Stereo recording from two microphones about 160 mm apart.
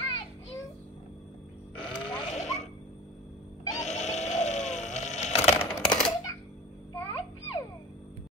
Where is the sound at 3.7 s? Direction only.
45° left (ahead or behind).